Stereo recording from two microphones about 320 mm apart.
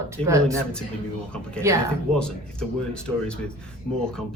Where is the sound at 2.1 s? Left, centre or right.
Centre.